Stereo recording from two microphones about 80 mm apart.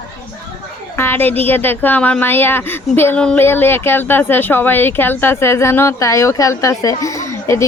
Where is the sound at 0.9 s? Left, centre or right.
Left.